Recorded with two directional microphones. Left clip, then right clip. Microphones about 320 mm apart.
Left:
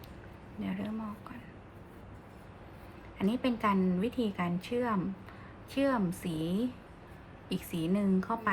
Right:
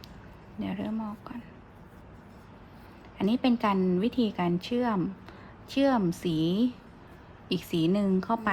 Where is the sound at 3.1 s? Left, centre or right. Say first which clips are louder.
Right 5 dB; right.